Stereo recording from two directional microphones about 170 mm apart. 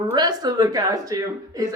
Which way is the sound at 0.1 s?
25° right (ahead or behind).